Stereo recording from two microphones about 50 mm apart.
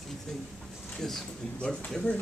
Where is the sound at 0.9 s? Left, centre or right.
Centre.